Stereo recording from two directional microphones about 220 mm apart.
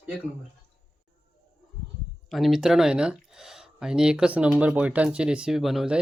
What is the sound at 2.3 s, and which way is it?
Speech, centre (ahead or behind).